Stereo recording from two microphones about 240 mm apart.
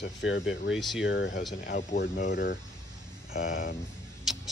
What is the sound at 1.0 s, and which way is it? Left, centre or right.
Speech, left.